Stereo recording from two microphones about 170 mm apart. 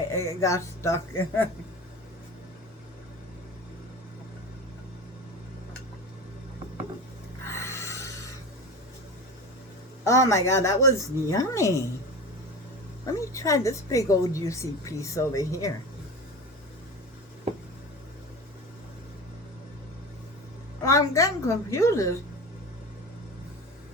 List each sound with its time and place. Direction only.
0.1 s speech: 15° left (ahead or behind)
7.4 s a sound: 15° left (ahead or behind)
10.1 s speech: 15° left (ahead or behind)
13.1 s a woman's voice: 20° left (ahead or behind)
20.8 s a woman's voice: 20° left (ahead or behind)